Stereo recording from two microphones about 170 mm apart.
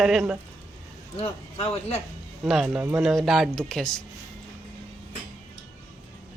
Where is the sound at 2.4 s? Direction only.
5° right (ahead or behind).